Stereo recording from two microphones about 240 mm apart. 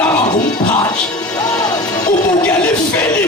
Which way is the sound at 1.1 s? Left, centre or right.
Centre.